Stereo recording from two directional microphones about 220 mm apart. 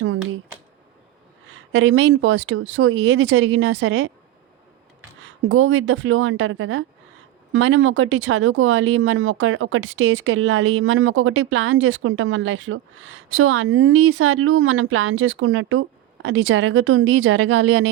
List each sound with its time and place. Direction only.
1.7 s speech: 60° right (ahead or behind)
5.2 s speech: 65° right (ahead or behind)